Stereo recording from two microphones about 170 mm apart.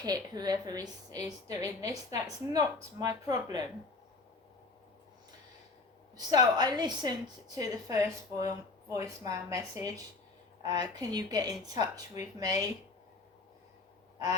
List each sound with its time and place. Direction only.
0.0 s a woman's voice: 25° right (ahead or behind)
6.1 s a woman's voice: 25° right (ahead or behind)